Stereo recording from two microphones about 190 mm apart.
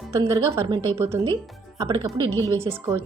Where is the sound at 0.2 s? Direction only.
15° right (ahead or behind).